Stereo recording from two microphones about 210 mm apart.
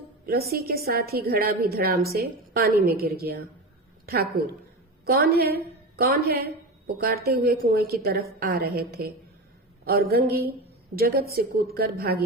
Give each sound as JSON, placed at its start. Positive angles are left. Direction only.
{"t": 0.3, "sound": "a woman's voice", "side_deg": -45}